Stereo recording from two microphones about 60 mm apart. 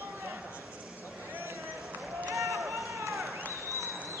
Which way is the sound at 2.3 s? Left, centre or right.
Right.